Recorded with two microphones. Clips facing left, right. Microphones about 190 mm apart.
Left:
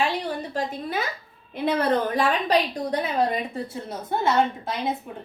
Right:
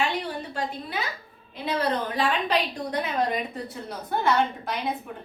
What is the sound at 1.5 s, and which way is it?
A woman's voice, 50° left (ahead or behind).